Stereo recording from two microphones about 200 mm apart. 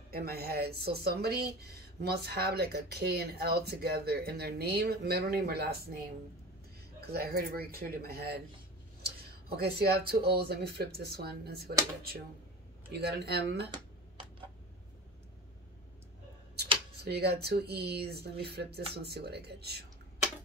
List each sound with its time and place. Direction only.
0.1 s speech: 50° right (ahead or behind)
7.0 s speech: 50° right (ahead or behind)
16.5 s speech: 55° right (ahead or behind)